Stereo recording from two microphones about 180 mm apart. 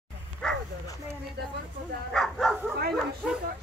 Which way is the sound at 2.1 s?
Centre (ahead or behind).